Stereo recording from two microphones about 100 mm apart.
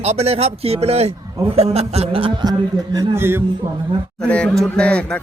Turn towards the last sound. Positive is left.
turn(degrees=10)  # may be behind; listen again after turning